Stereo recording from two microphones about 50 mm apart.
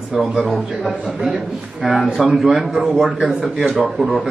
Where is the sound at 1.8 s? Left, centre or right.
Centre.